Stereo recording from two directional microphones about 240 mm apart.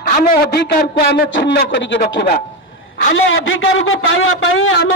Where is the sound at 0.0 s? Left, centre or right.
Left.